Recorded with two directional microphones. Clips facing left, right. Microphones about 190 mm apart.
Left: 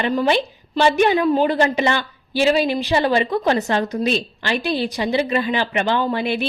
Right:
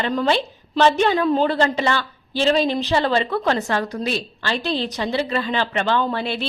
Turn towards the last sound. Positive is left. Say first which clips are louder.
# left 2 dB
turn(degrees=15)  # may be behind; listen again after turning